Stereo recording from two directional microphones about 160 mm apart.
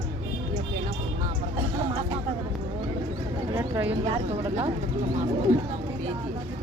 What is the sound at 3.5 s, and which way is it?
Speech, 15° right (ahead or behind).